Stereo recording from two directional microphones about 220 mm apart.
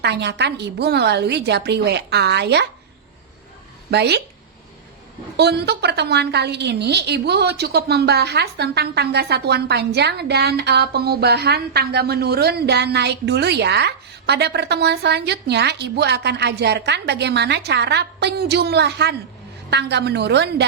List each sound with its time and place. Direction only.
0.0 s a woman's voice: 50° right (ahead or behind)
3.9 s a woman's voice: 50° right (ahead or behind)
5.4 s a woman's voice: 50° right (ahead or behind)